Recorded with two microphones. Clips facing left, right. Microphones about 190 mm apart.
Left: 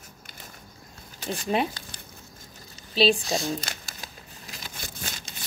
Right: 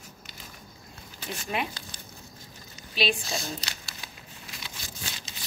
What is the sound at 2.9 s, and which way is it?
Speech, 35° left (ahead or behind).